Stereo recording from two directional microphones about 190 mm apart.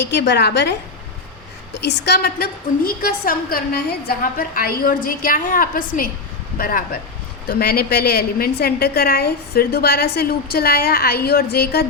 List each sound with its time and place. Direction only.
0.0 s a woman's voice: 60° left (ahead or behind)
1.8 s a woman's voice: 60° left (ahead or behind)